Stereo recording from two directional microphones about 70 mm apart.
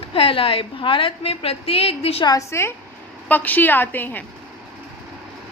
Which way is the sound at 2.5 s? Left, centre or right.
Left.